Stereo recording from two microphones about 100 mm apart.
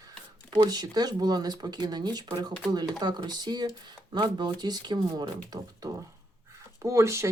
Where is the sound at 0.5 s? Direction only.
35° right (ahead or behind).